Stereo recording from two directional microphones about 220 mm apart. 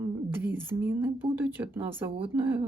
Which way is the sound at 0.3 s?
10° right (ahead or behind).